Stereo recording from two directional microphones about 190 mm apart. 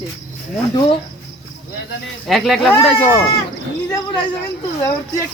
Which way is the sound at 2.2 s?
Centre (ahead or behind).